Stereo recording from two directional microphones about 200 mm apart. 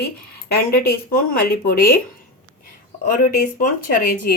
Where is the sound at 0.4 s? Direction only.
50° left (ahead or behind).